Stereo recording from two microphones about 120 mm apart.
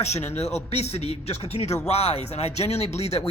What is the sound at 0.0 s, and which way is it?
Speech, 65° left (ahead or behind).